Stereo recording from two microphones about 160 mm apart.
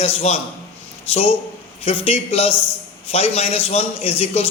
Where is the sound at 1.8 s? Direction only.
40° left (ahead or behind).